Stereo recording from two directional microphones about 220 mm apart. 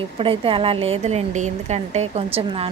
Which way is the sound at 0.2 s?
25° right (ahead or behind).